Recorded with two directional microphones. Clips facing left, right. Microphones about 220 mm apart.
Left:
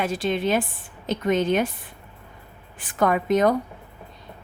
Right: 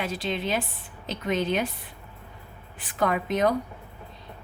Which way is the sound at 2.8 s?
50° left (ahead or behind).